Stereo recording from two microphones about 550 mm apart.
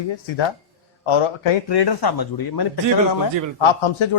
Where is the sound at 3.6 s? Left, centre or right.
Left.